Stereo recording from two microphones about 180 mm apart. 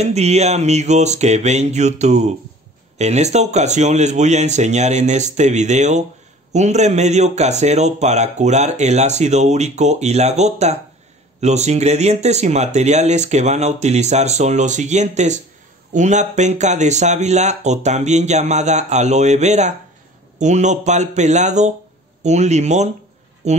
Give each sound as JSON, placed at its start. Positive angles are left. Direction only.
{"t": 0.0, "sound": "speech", "side_deg": -35}